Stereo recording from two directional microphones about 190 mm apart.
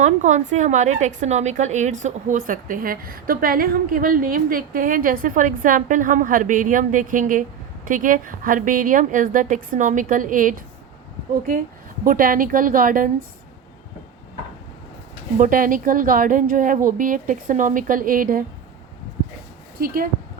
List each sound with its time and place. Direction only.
0.0 s a woman's voice: 40° right (ahead or behind)
12.0 s a woman's voice: 45° right (ahead or behind)
15.4 s a woman's voice: 45° right (ahead or behind)
19.8 s a woman's voice: 50° right (ahead or behind)